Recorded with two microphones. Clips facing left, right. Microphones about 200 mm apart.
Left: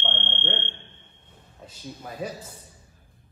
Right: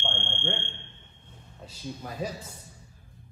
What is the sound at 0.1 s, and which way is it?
Fire alarm, 20° left (ahead or behind).